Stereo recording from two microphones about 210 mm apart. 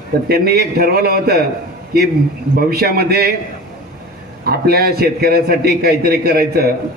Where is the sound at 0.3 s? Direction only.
50° right (ahead or behind).